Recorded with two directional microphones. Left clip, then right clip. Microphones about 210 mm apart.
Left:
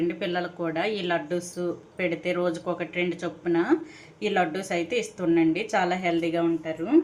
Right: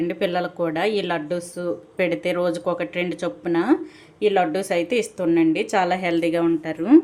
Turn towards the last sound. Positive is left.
turn(degrees=-45)  # may be behind; listen again after turning